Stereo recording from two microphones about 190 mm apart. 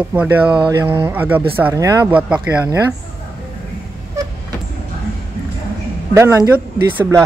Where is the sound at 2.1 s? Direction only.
5° right (ahead or behind).